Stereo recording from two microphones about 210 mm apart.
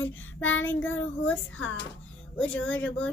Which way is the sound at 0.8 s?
5° left (ahead or behind).